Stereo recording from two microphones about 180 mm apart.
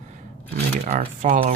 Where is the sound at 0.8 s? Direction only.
45° right (ahead or behind).